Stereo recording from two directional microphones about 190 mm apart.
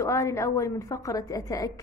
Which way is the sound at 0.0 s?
15° left (ahead or behind).